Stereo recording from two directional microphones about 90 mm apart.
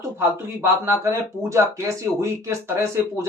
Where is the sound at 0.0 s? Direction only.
30° right (ahead or behind).